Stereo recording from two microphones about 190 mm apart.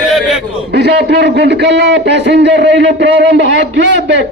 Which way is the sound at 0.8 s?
60° right (ahead or behind).